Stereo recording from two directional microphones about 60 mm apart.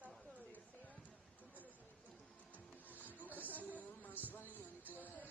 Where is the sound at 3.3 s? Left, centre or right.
Right.